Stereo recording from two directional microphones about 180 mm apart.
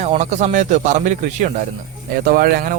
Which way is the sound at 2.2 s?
55° right (ahead or behind).